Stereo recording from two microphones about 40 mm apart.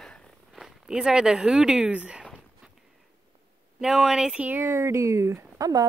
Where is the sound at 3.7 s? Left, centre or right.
Centre.